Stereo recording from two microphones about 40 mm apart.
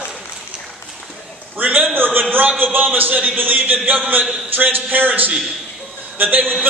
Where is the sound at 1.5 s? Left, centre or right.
Right.